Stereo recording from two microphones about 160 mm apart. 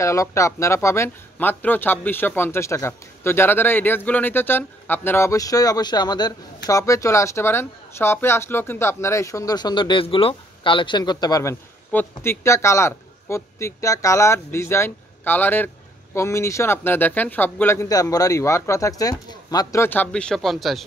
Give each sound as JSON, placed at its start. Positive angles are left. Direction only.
{"t": 0.0, "sound": "speech", "side_deg": 20}
{"t": 11.9, "sound": "speech", "side_deg": 15}